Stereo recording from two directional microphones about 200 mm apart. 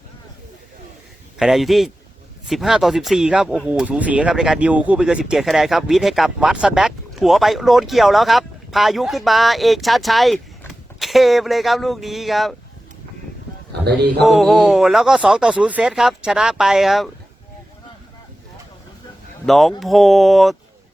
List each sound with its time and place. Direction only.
1.4 s speech: centre (ahead or behind)
14.2 s speech: centre (ahead or behind)
19.5 s speech: centre (ahead or behind)